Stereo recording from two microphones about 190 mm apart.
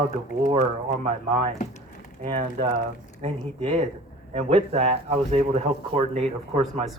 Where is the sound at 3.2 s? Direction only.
30° right (ahead or behind).